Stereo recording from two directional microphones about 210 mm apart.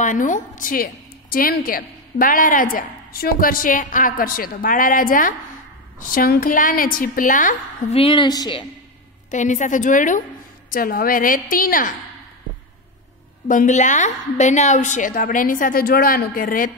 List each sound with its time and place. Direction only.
0.0 s a woman's voice: 35° left (ahead or behind)
8.0 s a woman's voice: 25° left (ahead or behind)
9.3 s a woman's voice: 35° left (ahead or behind)
13.5 s a woman's voice: 35° left (ahead or behind)